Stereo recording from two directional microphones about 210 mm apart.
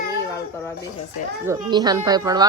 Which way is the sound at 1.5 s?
20° right (ahead or behind).